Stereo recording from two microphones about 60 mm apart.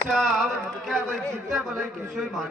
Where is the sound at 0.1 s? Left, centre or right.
Centre.